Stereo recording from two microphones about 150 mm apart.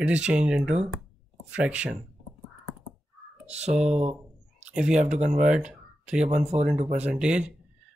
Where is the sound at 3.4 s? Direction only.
45° right (ahead or behind).